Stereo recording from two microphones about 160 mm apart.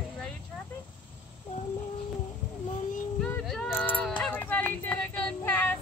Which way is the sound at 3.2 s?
5° left (ahead or behind).